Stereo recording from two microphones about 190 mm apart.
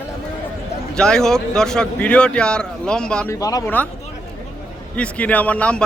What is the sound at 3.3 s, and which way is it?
Speech, 20° left (ahead or behind).